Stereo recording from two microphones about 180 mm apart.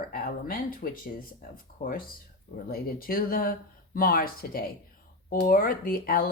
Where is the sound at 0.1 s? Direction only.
50° left (ahead or behind).